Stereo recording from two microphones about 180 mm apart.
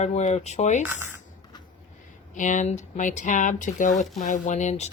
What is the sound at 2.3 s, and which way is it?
Speech, 45° left (ahead or behind).